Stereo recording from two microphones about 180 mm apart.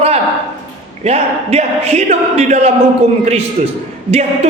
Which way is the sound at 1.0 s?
35° right (ahead or behind).